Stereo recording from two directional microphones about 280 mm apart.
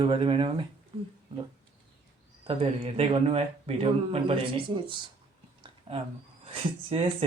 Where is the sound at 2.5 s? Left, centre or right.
Centre.